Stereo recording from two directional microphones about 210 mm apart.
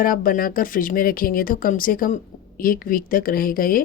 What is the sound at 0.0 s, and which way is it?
Speech, 40° left (ahead or behind).